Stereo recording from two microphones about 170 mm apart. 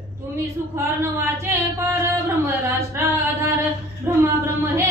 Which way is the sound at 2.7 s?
15° right (ahead or behind).